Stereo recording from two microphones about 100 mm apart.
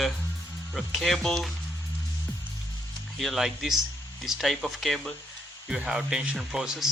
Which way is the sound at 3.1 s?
Centre (ahead or behind).